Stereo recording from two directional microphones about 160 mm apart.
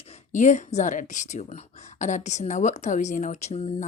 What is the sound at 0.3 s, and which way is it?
Speech, 50° left (ahead or behind).